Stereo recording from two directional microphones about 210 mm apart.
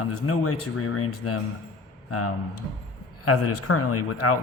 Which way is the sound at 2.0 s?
90° left.